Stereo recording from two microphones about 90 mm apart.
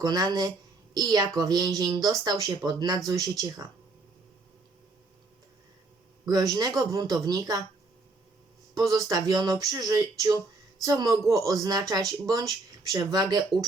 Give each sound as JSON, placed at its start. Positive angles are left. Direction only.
{"t": 0.0, "sound": "speech", "side_deg": -45}
{"t": 6.2, "sound": "speech", "side_deg": -45}
{"t": 8.9, "sound": "speech", "side_deg": -45}